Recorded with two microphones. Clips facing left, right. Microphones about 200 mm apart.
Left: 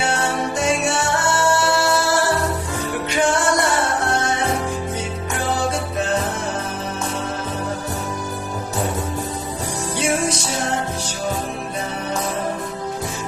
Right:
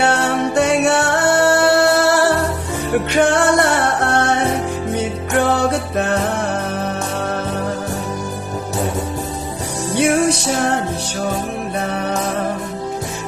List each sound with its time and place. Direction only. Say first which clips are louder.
0.0 s music: right 5 dB; 65° right (ahead or behind)
10.0 s music: right 7 dB; 60° right (ahead or behind)